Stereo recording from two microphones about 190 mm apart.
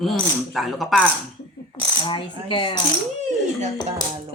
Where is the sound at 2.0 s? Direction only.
25° left (ahead or behind).